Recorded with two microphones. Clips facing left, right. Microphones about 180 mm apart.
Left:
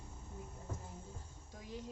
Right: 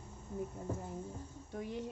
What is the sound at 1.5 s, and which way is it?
Speech, 60° right (ahead or behind).